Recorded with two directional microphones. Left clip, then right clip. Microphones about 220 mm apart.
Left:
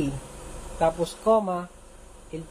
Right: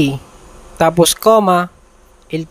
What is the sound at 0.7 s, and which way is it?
Speech, 50° right (ahead or behind).